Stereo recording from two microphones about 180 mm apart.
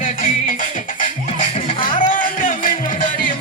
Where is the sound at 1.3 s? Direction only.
30° left (ahead or behind).